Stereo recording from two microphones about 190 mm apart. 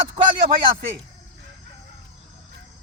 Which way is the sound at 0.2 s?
40° right (ahead or behind).